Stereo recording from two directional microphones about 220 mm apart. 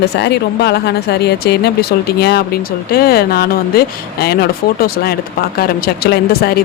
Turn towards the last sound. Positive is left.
turn(degrees=45)  # may be behind; listen again after turning